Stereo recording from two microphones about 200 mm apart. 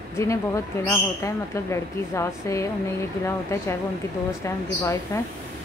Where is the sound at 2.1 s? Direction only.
15° left (ahead or behind).